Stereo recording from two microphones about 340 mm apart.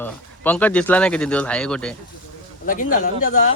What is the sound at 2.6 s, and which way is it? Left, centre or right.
Speech, left.